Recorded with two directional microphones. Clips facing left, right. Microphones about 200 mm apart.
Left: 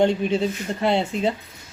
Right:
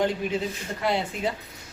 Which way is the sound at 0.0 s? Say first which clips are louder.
Left 6 dB; 25° left (ahead or behind).